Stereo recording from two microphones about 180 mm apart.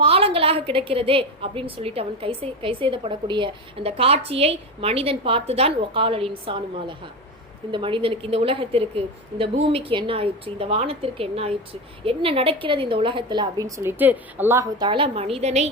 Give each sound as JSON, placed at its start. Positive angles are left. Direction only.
{"t": 0.0, "sound": "a woman's voice", "side_deg": -30}